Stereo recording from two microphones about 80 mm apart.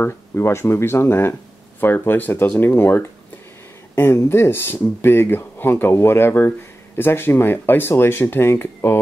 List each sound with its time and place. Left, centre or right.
0.0 s speech: left